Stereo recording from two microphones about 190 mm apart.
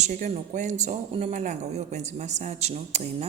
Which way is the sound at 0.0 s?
40° right (ahead or behind).